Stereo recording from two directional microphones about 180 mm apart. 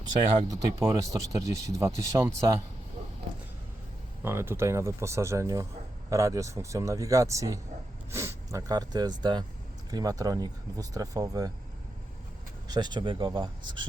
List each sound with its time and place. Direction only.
0.3 s speech: 20° right (ahead or behind)
4.2 s speech: 15° right (ahead or behind)
12.6 s speech: 25° right (ahead or behind)